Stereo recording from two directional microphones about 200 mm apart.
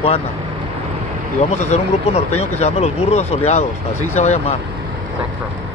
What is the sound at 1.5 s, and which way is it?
Speech, 35° left (ahead or behind).